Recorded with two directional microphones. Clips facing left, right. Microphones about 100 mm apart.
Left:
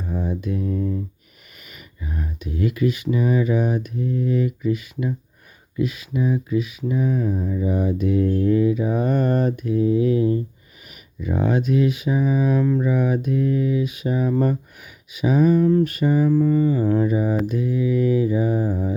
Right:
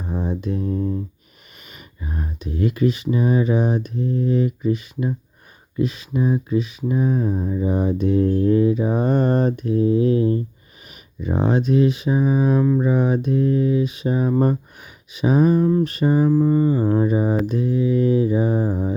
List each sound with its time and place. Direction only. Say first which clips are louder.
0.0 s mantra: right 1 dB; 25° right (ahead or behind)
1.6 s speech: right 1 dB; 35° right (ahead or behind)